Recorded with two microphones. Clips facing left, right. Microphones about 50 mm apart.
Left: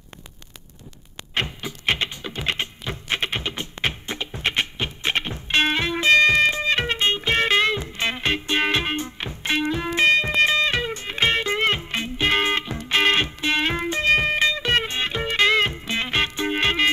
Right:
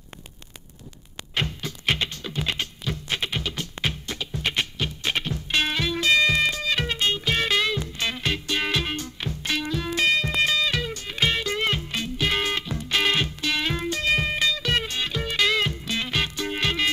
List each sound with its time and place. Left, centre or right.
1.3 s music: centre